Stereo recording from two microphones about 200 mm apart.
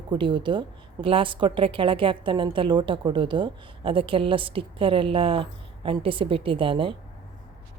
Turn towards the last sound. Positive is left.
turn(degrees=-25)  # may be behind; listen again after turning